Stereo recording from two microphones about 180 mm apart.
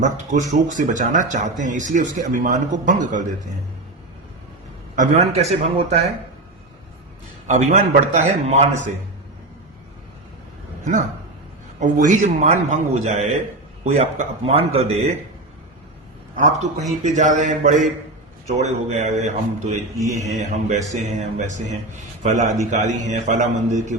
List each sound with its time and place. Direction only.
0.0 s speech: 45° right (ahead or behind)
4.9 s a man's voice: 40° right (ahead or behind)
7.4 s speech: 40° right (ahead or behind)
11.8 s a man's voice: 45° right (ahead or behind)
16.3 s a man's voice: 45° right (ahead or behind)
20.0 s speech: 15° right (ahead or behind)
20.2 s a man's voice: 40° right (ahead or behind)